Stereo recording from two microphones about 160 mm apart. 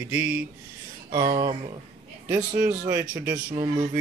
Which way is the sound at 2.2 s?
20° right (ahead or behind).